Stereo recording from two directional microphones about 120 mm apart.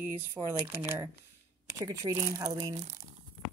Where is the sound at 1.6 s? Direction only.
30° right (ahead or behind).